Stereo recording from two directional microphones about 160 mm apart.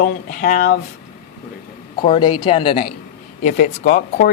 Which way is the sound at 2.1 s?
30° left (ahead or behind).